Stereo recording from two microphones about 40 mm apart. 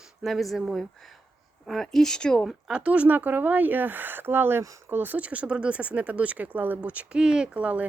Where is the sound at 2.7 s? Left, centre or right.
Right.